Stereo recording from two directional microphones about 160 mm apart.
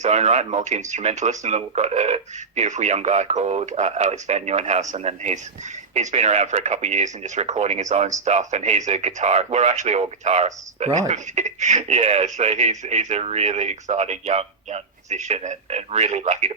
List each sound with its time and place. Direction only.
0.0 s speech: 45° right (ahead or behind)